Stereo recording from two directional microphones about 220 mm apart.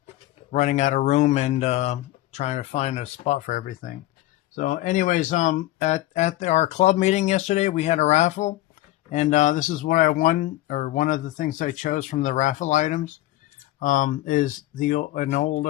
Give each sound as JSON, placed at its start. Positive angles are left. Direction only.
{"t": 0.5, "sound": "speech", "side_deg": 35}